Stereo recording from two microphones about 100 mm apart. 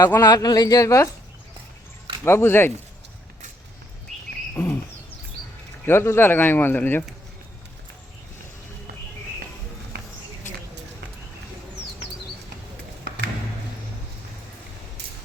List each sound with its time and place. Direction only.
0.2 s speech: 40° left (ahead or behind)
2.2 s speech: 25° left (ahead or behind)
4.5 s a sound: 25° left (ahead or behind)
5.8 s speech: 25° left (ahead or behind)